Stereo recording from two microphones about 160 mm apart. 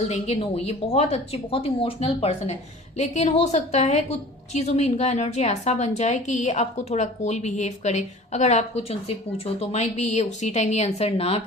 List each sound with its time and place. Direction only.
0.1 s a woman's voice: 40° left (ahead or behind)